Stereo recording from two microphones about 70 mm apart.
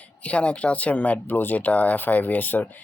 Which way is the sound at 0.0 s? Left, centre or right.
Centre.